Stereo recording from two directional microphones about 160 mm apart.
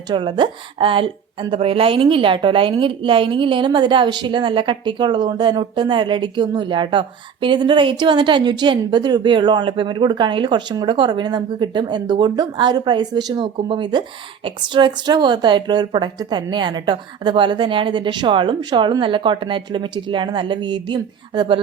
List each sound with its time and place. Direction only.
0.1 s a woman's voice: 30° right (ahead or behind)